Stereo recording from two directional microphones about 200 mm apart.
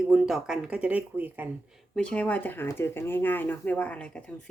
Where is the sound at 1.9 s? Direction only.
5° left (ahead or behind).